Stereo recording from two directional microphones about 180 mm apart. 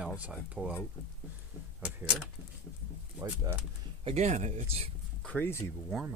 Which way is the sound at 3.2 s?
15° right (ahead or behind).